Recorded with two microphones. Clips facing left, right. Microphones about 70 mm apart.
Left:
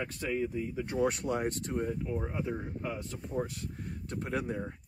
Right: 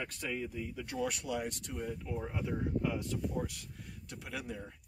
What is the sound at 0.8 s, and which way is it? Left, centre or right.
Speech, left.